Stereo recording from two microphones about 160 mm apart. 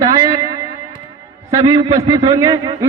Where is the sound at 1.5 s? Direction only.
25° right (ahead or behind).